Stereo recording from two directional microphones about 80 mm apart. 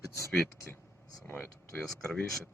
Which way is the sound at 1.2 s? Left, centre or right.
Left.